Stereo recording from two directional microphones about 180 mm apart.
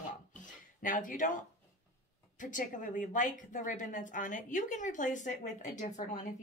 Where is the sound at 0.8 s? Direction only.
45° left (ahead or behind).